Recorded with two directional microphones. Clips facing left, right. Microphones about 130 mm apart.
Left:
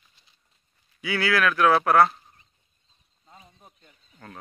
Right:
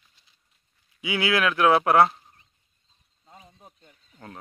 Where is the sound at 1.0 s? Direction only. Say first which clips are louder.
Even; 20° right (ahead or behind).